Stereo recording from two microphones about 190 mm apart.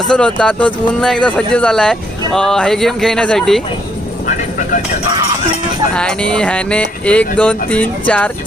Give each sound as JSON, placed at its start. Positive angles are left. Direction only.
{"t": 0.1, "sound": "speech", "side_deg": 5}
{"t": 5.9, "sound": "speech", "side_deg": 5}